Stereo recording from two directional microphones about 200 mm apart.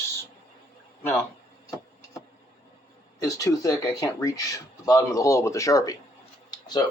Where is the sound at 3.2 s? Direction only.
15° left (ahead or behind).